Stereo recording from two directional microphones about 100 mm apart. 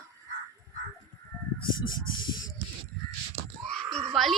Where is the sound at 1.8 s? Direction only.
50° left (ahead or behind).